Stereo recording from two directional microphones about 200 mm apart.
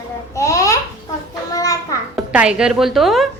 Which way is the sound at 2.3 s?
5° right (ahead or behind).